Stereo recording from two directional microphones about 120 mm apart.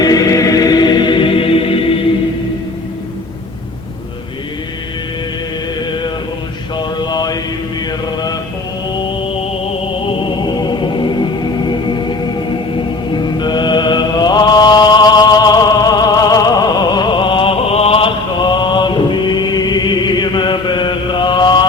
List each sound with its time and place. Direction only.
0.0 s music: 30° left (ahead or behind); by 2.0 s 50° left (ahead or behind)
5.8 s chant: 40° left (ahead or behind)
6.7 s mantra: 35° left (ahead or behind)
8.9 s music: 50° left (ahead or behind)
10.1 s music: 40° left (ahead or behind)
13.1 s mantra: 40° left (ahead or behind); by 18.1 s 55° left (ahead or behind)
18.4 s chant: 40° left (ahead or behind)